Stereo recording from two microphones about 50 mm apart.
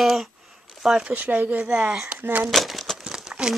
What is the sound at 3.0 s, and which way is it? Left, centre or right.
Crumpling, centre.